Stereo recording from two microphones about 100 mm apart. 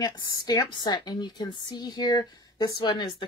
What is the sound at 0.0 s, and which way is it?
Speech, 35° left (ahead or behind).